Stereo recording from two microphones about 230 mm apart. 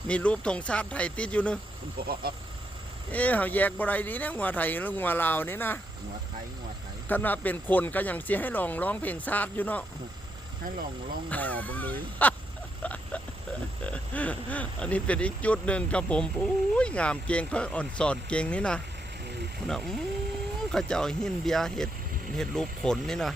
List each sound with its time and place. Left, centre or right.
0.1 s speech: centre
2.0 s speech: right
3.1 s speech: centre
7.1 s speech: centre
11.3 s speech: centre
12.8 s a sound: centre
13.8 s speech: centre